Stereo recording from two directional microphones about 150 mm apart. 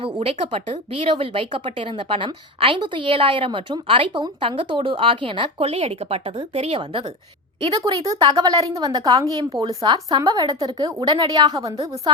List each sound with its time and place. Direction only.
0.0 s a woman's voice: 40° right (ahead or behind)